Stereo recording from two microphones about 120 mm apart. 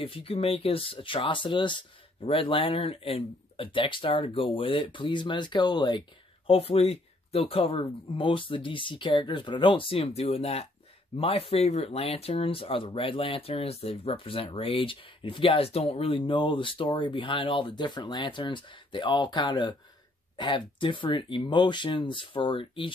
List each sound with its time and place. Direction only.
0.0 s speech: 50° left (ahead or behind)